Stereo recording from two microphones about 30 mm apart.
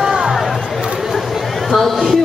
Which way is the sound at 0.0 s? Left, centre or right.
Centre.